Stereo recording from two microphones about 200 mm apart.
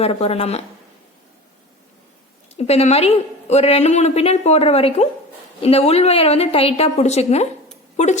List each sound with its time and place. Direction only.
0.0 s a woman's voice: 30° left (ahead or behind)
2.6 s a woman's voice: 30° left (ahead or behind)